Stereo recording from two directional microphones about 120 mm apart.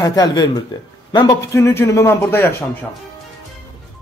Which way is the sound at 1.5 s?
20° left (ahead or behind).